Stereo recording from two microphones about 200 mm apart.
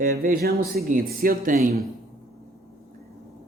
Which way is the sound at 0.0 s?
45° right (ahead or behind).